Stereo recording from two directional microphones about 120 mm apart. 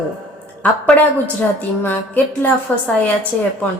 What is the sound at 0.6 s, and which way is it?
A woman's voice, 10° left (ahead or behind).